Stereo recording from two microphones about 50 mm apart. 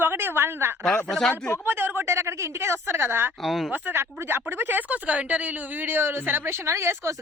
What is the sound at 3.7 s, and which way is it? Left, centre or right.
A woman's voice, right.